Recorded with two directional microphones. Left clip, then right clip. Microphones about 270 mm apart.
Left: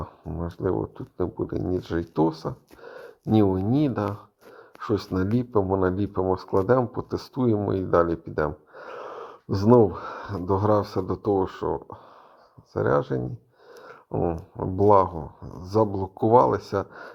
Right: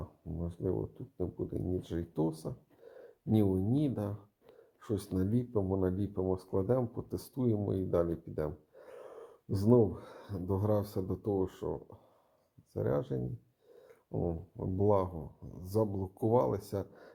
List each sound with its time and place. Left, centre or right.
0.0 s speech: left